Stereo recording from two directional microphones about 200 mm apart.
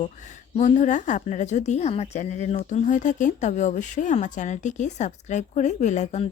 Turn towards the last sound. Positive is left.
turn(degrees=35)  # may be behind; listen again after turning